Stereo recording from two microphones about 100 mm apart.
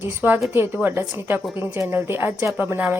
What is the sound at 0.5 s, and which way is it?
Speech, 20° right (ahead or behind).